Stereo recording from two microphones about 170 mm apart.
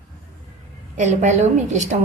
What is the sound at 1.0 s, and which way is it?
Speech, 45° right (ahead or behind).